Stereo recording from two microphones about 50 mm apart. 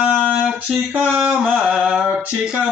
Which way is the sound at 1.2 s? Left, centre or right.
Centre.